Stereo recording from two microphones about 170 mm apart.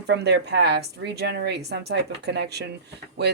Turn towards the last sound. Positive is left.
turn(degrees=-80)